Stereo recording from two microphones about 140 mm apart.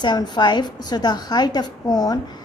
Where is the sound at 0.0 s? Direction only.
30° left (ahead or behind).